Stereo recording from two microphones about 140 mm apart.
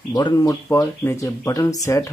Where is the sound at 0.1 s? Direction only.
25° left (ahead or behind).